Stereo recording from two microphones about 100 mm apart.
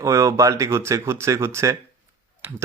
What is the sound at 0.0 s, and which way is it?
Speech, 30° right (ahead or behind).